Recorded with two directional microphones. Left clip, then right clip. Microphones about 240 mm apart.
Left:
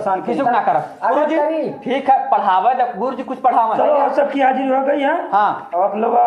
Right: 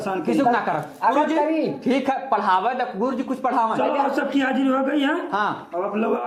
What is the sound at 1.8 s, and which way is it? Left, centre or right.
Speech, right.